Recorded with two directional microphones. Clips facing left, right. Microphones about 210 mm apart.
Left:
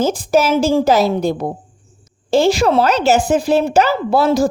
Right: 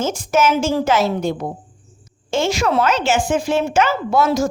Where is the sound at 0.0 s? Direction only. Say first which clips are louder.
Left 3 dB; 35° left (ahead or behind).